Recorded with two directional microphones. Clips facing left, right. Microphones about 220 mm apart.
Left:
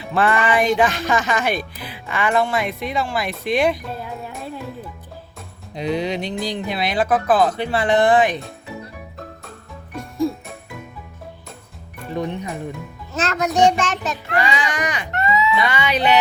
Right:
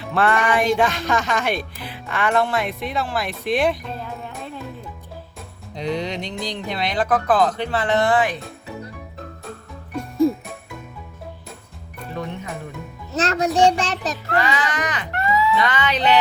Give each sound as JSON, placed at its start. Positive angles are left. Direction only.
{"t": 0.1, "sound": "speech", "side_deg": 0}
{"t": 5.7, "sound": "speech", "side_deg": 10}
{"t": 12.2, "sound": "speech", "side_deg": 20}
{"t": 13.1, "sound": "child singing", "side_deg": -35}
{"t": 14.3, "sound": "speech", "side_deg": 15}